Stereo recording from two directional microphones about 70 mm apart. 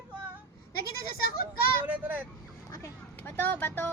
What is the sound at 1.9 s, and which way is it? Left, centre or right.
Speech, right.